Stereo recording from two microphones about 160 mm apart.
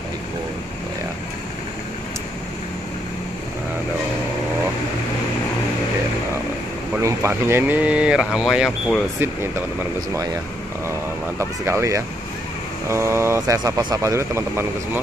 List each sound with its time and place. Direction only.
7.0 s speech: 20° right (ahead or behind); by 9.0 s centre (ahead or behind)
11.3 s speech: 15° right (ahead or behind)